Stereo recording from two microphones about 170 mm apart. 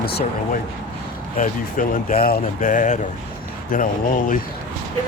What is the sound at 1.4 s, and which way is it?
Speech, 55° left (ahead or behind).